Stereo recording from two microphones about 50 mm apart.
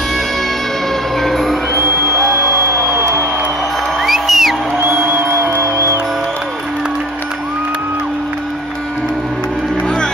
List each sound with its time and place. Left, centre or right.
1.2 s music: centre
1.7 s music: right
4.0 s music: centre
4.8 s music: right
5.6 s music: right